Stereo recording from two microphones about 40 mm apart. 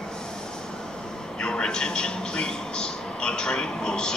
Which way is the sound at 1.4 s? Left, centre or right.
Left.